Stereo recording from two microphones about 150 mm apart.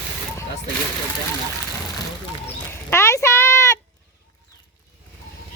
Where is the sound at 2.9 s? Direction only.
20° left (ahead or behind).